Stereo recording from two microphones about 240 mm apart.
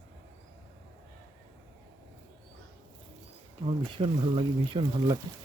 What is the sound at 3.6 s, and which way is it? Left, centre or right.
Speech, right.